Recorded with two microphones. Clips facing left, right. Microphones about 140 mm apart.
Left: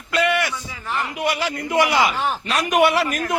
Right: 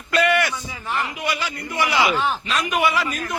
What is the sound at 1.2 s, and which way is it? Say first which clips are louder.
Speech: left 4 dB; 75° left (ahead or behind).